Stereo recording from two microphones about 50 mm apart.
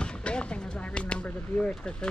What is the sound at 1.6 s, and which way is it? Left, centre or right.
Speech, centre.